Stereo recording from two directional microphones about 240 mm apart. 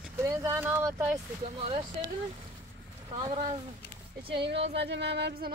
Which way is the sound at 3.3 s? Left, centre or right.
Right.